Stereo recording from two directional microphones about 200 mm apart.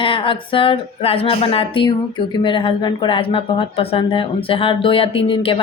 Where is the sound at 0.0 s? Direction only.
25° left (ahead or behind).